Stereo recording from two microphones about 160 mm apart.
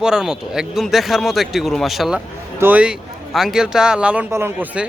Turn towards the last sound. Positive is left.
turn(degrees=-10)  # may be behind; listen again after turning